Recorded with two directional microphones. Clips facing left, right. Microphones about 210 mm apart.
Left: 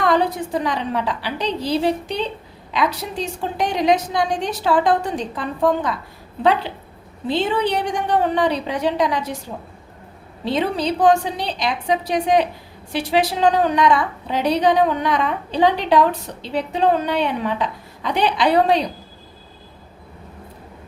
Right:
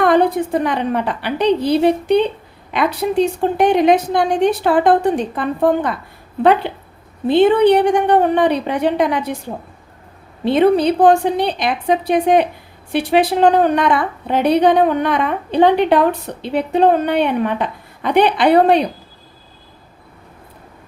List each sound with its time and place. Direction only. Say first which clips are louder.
0.0 s a woman's voice: right 5 dB; 55° right (ahead or behind)
10.4 s a woman's voice: right 8 dB; 55° right (ahead or behind)